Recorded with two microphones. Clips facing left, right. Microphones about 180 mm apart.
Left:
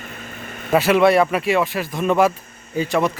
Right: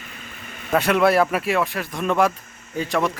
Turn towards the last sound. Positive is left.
turn(degrees=0)  # may be behind; listen again after turning